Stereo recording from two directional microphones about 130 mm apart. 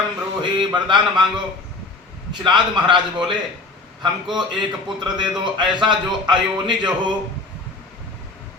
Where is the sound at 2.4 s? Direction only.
35° right (ahead or behind).